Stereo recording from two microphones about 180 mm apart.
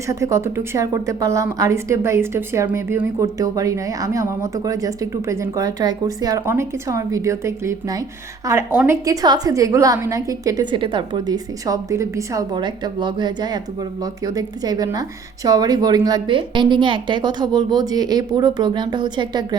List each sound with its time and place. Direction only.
0.1 s a woman's voice: 15° right (ahead or behind)